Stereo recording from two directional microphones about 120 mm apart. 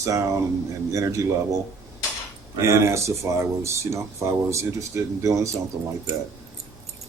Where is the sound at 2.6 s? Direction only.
25° right (ahead or behind).